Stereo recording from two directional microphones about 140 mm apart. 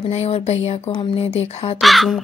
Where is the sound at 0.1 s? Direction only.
50° left (ahead or behind).